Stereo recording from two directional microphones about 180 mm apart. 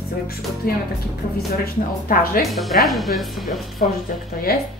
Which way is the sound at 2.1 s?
55° left (ahead or behind).